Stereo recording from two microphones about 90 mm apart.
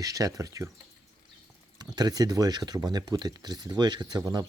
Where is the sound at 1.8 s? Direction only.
45° right (ahead or behind).